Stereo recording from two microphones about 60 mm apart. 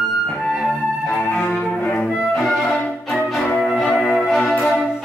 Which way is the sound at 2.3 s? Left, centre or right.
Centre.